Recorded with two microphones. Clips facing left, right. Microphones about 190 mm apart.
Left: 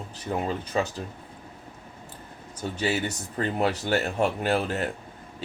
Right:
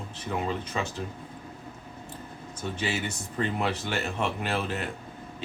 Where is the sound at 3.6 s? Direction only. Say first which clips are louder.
Left 5 dB; 40° left (ahead or behind).